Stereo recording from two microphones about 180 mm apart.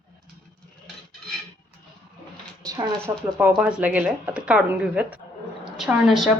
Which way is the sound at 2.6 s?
20° right (ahead or behind).